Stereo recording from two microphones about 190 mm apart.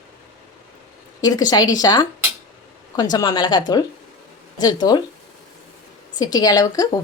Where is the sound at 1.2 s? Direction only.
20° left (ahead or behind).